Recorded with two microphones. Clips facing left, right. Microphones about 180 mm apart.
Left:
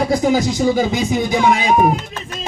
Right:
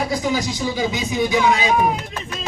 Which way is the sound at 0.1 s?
50° left (ahead or behind).